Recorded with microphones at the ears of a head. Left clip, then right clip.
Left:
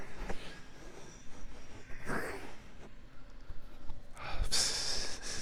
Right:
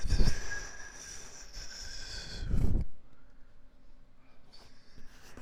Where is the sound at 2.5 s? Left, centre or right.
Right.